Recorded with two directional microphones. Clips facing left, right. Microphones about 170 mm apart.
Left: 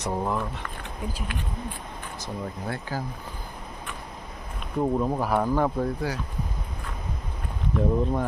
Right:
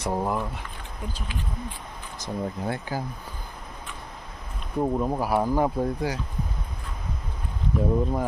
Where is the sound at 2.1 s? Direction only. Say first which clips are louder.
Right 4 dB; 15° right (ahead or behind).